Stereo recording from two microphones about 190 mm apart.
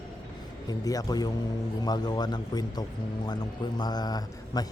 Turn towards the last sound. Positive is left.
turn(degrees=20)  # may be behind; listen again after turning